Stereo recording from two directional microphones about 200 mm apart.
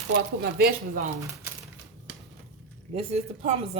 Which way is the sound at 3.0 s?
30° right (ahead or behind).